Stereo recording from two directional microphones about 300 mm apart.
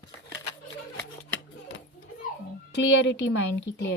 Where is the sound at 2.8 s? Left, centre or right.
Left.